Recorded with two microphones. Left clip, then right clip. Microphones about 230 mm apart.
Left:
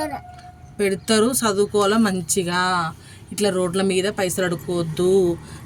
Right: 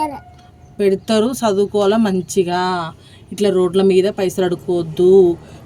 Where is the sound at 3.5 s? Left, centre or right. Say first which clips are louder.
Right 7 dB; centre.